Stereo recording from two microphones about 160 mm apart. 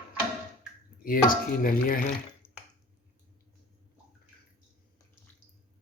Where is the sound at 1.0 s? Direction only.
60° left (ahead or behind).